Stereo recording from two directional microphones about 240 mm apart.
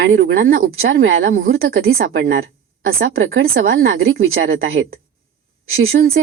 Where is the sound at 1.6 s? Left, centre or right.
Right.